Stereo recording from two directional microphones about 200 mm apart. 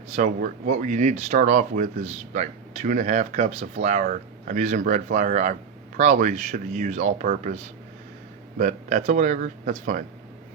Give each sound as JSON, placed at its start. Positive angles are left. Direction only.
{"t": 0.2, "sound": "speech", "side_deg": -40}